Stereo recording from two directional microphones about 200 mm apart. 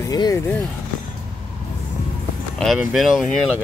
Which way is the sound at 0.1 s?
15° left (ahead or behind).